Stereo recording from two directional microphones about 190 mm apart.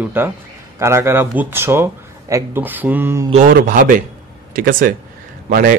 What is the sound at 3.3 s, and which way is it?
A man's voice, 40° right (ahead or behind).